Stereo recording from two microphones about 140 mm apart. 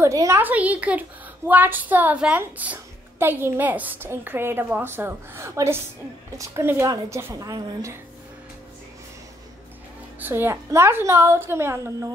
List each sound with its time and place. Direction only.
0.0 s a child's voice: 20° right (ahead or behind)
10.2 s a child's voice: 15° right (ahead or behind)